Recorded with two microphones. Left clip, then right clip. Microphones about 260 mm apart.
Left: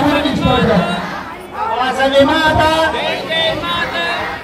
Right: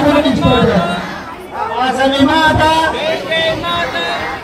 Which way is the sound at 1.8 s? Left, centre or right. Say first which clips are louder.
Left 1 dB; left.